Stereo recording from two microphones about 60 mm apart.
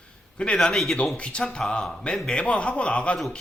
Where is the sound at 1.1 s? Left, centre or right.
Centre.